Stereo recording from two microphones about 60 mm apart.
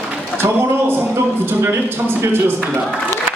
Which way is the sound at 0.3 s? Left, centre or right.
Right.